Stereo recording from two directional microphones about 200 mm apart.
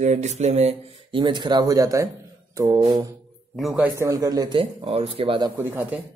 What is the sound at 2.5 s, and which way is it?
Mantra, 20° right (ahead or behind).